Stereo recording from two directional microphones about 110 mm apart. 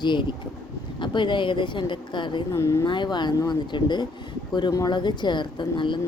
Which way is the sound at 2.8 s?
45° left (ahead or behind).